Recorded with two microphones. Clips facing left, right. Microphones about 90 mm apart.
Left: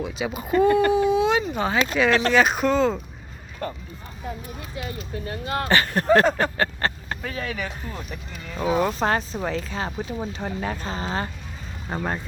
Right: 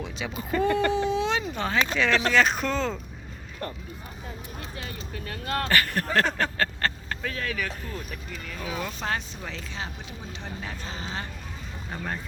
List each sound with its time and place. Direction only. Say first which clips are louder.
0.2 s speech: left 6 dB; 15° left (ahead or behind)
5.1 s speech: left 6 dB; 25° left (ahead or behind)
5.5 s speech: left 2 dB; 10° left (ahead or behind)
5.7 s speech: left 7 dB; 20° left (ahead or behind)
7.9 s speech: left 1 dB; 30° left (ahead or behind)